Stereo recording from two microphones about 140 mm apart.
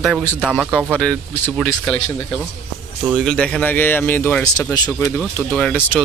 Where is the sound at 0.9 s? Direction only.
10° left (ahead or behind).